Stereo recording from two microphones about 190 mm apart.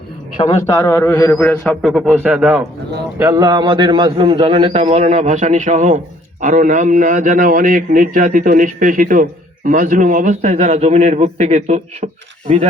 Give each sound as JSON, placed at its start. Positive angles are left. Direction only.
{"t": 0.3, "sound": "a man's voice", "side_deg": 15}
{"t": 1.9, "sound": "speech", "side_deg": -10}
{"t": 3.2, "sound": "a man's voice", "side_deg": -15}